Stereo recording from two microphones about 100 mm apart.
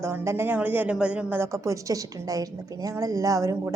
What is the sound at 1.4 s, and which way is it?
A woman's voice, 30° right (ahead or behind).